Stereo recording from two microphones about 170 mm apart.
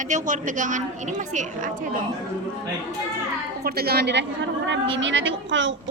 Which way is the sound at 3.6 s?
65° right (ahead or behind).